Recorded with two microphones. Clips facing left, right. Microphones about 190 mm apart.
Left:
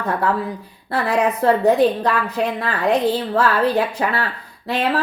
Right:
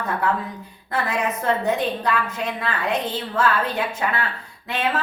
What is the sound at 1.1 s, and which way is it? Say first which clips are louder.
A woman's voice: left 8 dB; 35° left (ahead or behind).